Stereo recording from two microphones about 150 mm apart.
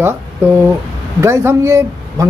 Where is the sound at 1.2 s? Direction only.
15° right (ahead or behind).